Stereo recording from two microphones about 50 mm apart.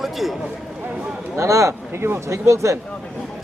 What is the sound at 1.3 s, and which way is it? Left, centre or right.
Speech, right.